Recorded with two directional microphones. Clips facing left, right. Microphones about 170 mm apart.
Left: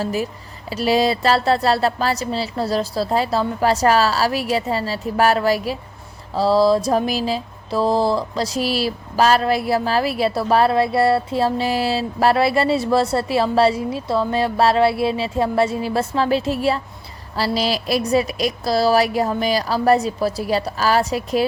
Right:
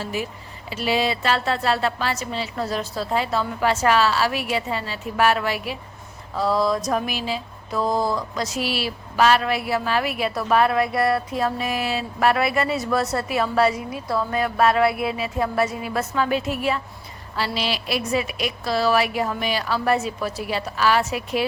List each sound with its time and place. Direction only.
0.0 s mantra: 40° left (ahead or behind)